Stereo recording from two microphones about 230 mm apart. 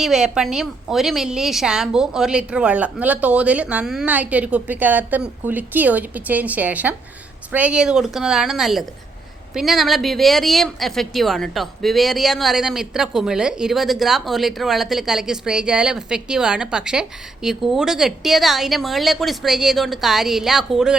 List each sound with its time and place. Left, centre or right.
0.0 s speech: centre